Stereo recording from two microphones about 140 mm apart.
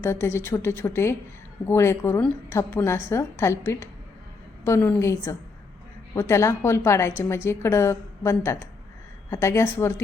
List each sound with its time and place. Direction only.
0.0 s a woman's voice: 20° left (ahead or behind)